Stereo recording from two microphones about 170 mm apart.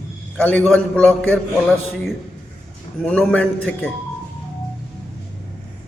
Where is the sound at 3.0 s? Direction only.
5° left (ahead or behind).